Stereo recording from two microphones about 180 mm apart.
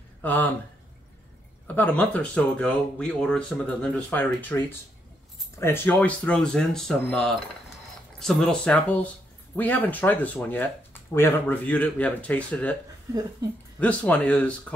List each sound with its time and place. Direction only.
0.2 s speech: 10° left (ahead or behind)
1.8 s speech: 10° left (ahead or behind)
13.4 s speech: 20° right (ahead or behind)
13.7 s speech: 10° left (ahead or behind)